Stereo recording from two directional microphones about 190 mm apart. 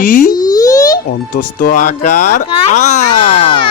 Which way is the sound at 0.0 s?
45° left (ahead or behind).